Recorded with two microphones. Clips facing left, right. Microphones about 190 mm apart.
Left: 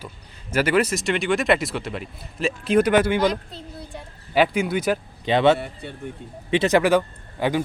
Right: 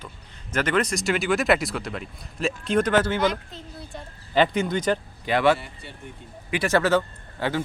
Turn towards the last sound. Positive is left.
turn(degrees=15)  # may be behind; listen again after turning